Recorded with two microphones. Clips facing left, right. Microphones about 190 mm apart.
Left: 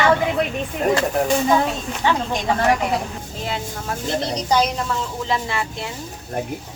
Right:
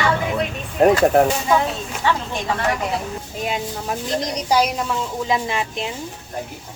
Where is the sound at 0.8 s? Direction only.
70° right (ahead or behind).